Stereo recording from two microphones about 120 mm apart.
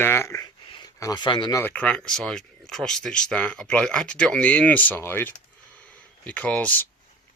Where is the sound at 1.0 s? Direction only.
35° left (ahead or behind).